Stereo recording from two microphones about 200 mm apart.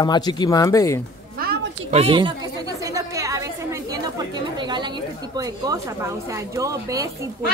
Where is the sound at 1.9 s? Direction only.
25° right (ahead or behind).